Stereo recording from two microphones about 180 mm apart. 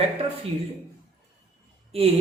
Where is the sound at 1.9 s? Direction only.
35° right (ahead or behind).